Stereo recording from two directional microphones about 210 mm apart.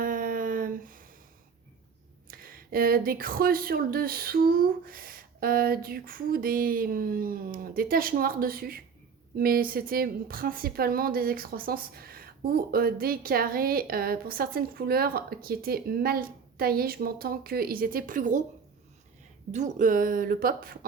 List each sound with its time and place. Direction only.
0.0 s a sound: 40° right (ahead or behind)
2.2 s speech: 45° right (ahead or behind)
19.5 s speech: 35° right (ahead or behind)